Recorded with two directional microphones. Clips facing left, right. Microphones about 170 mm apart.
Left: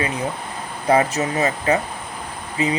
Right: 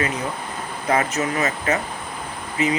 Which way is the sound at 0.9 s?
30° left (ahead or behind).